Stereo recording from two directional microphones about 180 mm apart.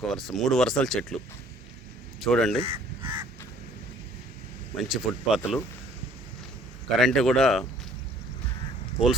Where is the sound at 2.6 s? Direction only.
30° right (ahead or behind).